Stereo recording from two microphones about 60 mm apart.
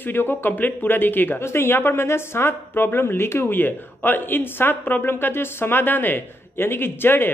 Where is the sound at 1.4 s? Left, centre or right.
Left.